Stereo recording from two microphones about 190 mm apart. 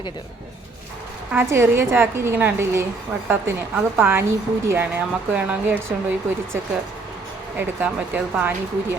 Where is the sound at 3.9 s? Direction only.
10° right (ahead or behind).